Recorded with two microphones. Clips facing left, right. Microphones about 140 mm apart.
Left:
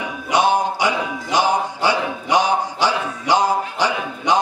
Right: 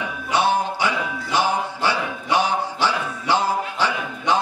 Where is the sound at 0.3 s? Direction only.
15° left (ahead or behind).